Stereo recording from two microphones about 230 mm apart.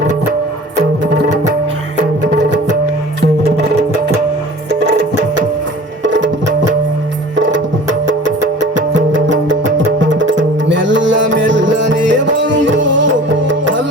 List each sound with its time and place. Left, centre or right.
4.7 s music: right